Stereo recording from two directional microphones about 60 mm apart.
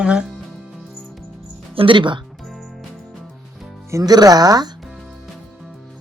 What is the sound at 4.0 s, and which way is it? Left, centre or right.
Speech, right.